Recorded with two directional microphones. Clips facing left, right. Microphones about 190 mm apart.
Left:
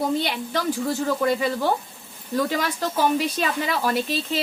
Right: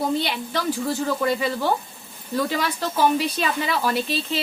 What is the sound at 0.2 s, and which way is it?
Speech, 45° left (ahead or behind).